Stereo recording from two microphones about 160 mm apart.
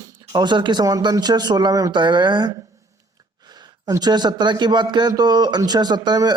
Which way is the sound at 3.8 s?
25° right (ahead or behind).